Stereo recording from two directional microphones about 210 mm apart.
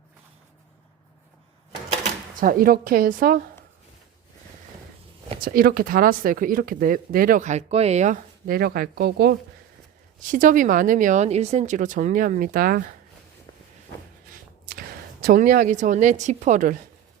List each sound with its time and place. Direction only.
2.3 s a woman's voice: 40° right (ahead or behind)
5.4 s speech: 40° right (ahead or behind)
10.2 s speech: 35° right (ahead or behind)
14.7 s speech: 45° right (ahead or behind)